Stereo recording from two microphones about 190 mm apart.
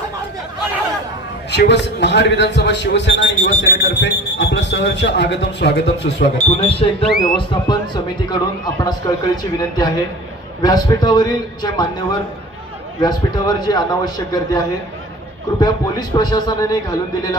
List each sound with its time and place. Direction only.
1.5 s speech: 65° left (ahead or behind)
6.7 s speech: 30° left (ahead or behind)
15.6 s speech: 20° left (ahead or behind)